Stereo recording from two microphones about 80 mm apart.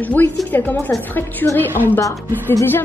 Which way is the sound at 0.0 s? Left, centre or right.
Left.